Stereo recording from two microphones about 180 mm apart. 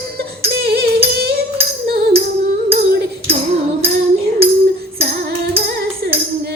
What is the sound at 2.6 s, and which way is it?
Music, 60° right (ahead or behind).